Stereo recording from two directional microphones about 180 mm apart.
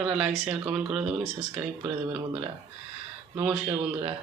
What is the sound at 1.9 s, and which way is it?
Speech, 20° right (ahead or behind).